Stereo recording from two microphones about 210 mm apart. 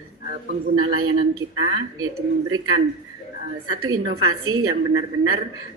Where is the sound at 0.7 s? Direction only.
90° right.